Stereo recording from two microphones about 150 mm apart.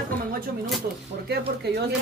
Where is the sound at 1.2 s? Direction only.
90° right.